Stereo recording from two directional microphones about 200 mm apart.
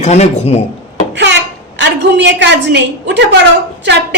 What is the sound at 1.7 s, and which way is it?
A woman's voice, 60° right (ahead or behind).